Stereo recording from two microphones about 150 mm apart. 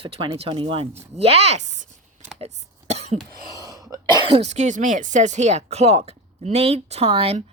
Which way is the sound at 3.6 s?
25° right (ahead or behind).